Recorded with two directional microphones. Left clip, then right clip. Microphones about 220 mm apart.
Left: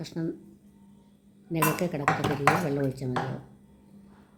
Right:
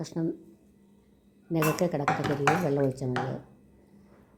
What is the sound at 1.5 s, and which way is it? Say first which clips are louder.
Speech: even; 10° right (ahead or behind).